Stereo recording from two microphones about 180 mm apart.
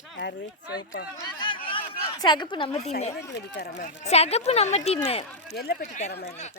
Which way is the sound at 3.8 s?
35° left (ahead or behind).